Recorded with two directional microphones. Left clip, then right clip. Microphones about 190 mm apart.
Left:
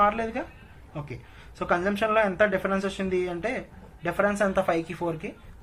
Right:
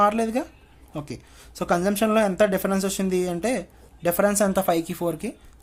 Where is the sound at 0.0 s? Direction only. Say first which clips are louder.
Right 3 dB; 60° right (ahead or behind).